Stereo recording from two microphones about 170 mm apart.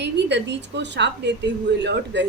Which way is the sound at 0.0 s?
90° right.